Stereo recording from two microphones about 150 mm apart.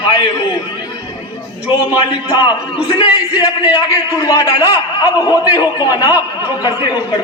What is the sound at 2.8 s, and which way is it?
Speech, 25° left (ahead or behind).